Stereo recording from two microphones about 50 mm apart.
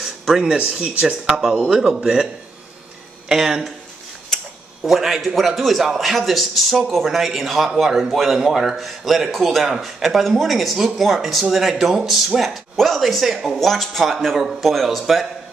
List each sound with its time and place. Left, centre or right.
0.0 s a sound: centre
0.6 s speech: right
3.3 s speech: centre
4.8 s a man's voice: centre